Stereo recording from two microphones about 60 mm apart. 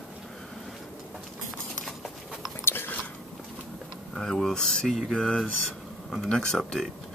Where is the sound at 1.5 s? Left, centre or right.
Centre.